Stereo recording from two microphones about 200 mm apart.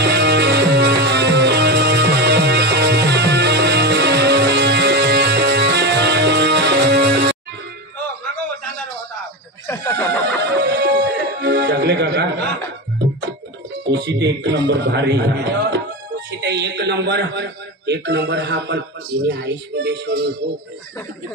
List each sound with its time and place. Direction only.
0.0 s music: 55° right (ahead or behind)
9.7 s a sound: 10° left (ahead or behind)
10.6 s music: 55° right (ahead or behind)
13.8 s a man's voice: 55° right (ahead or behind)